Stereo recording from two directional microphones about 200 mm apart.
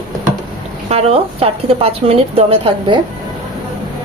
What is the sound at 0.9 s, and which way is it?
Speech, 30° right (ahead or behind).